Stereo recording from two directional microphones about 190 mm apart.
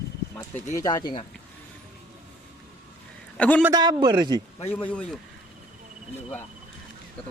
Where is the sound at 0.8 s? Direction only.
20° left (ahead or behind).